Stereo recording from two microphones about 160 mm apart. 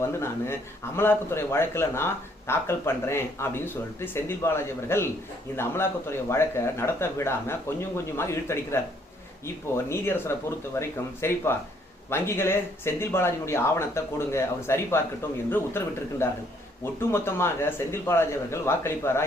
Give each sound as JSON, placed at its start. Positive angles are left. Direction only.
{"t": 0.0, "sound": "speech", "side_deg": 15}